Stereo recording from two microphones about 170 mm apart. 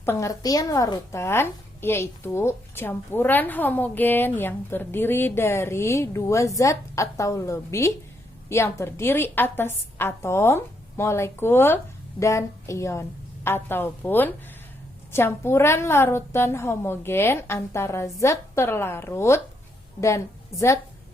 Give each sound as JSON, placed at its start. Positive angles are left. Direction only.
{"t": 0.0, "sound": "a woman's voice", "side_deg": 15}